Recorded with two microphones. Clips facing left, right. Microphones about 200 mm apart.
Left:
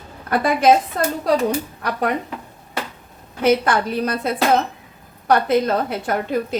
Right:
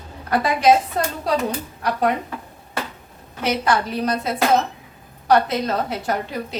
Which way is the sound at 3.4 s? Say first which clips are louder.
Left 4 dB; 55° left (ahead or behind).